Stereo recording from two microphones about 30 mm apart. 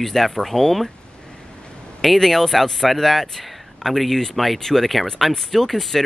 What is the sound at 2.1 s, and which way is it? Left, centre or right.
Speech, centre.